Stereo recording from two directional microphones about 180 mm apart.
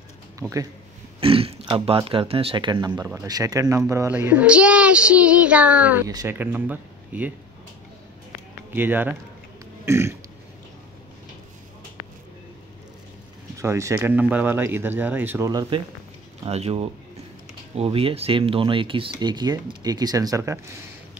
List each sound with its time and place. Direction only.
0.4 s speech: 15° right (ahead or behind)
1.2 s a child's voice: 30° right (ahead or behind); by 7.3 s 10° right (ahead or behind)
8.7 s a child's voice: 10° right (ahead or behind)
13.6 s a child's voice: 15° right (ahead or behind)
16.4 s a man's voice: 35° right (ahead or behind); by 20.5 s 20° right (ahead or behind)